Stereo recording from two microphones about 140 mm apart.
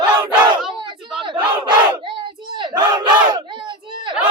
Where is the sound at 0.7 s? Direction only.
35° right (ahead or behind).